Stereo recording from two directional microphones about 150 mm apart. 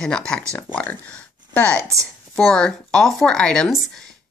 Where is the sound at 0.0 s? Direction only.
5° left (ahead or behind).